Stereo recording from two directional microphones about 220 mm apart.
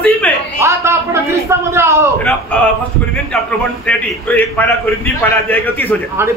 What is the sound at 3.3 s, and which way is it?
A man's voice, 5° left (ahead or behind).